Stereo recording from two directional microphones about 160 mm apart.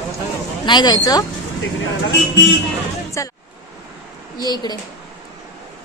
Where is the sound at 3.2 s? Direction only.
20° left (ahead or behind).